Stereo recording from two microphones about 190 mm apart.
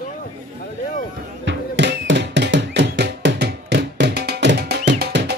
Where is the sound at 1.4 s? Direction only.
65° right (ahead or behind).